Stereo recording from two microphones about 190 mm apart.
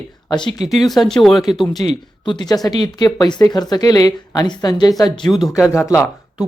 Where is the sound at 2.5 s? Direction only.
20° left (ahead or behind).